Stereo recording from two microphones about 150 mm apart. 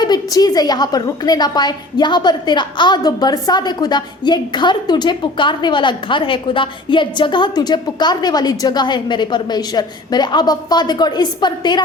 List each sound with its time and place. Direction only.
0.0 s a woman's voice: 25° left (ahead or behind)